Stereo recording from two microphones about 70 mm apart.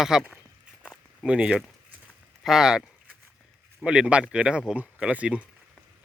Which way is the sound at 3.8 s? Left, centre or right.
Centre.